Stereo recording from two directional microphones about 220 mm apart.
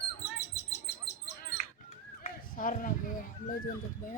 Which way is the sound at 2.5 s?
40° left (ahead or behind).